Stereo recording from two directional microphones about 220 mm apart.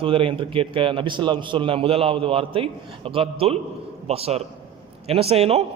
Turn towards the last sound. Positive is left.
turn(degrees=-25)  # may be behind; listen again after turning